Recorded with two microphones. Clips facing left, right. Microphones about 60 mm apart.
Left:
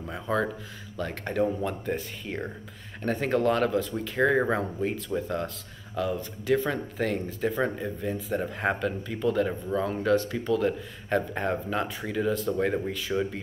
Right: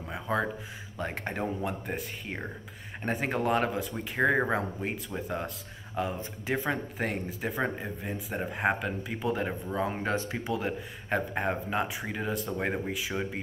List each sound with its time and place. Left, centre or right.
0.0 s a sound: centre
0.9 s speech: right
5.9 s speech: right
10.1 s speech: right